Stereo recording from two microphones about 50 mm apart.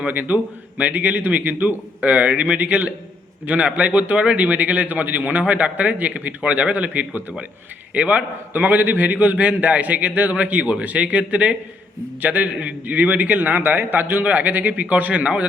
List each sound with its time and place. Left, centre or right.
0.1 s a man's voice: right